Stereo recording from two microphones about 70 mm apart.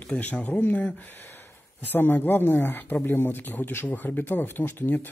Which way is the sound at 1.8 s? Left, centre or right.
Left.